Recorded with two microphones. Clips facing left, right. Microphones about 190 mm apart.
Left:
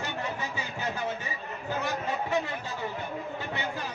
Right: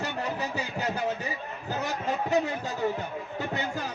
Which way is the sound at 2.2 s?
40° right (ahead or behind).